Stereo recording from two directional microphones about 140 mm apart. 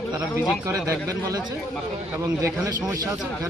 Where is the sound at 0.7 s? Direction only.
25° right (ahead or behind).